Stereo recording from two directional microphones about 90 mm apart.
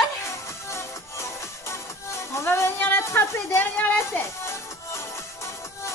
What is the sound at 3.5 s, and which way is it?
Music, 20° left (ahead or behind).